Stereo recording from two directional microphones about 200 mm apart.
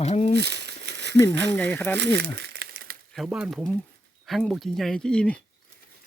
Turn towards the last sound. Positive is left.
turn(degrees=5)  # may be behind; listen again after turning